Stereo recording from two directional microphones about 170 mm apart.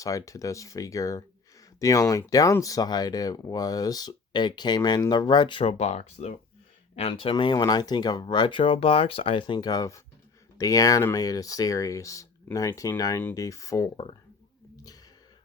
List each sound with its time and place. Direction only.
0.0 s speech: 20° left (ahead or behind)